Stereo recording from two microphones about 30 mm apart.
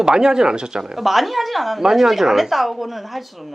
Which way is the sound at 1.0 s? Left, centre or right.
Centre.